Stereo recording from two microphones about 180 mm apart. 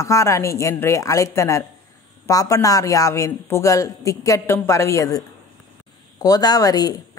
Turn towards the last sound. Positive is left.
turn(degrees=20)  # may be behind; listen again after turning